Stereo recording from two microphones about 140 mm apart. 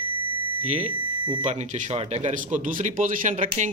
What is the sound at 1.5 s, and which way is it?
A man's voice, 55° right (ahead or behind).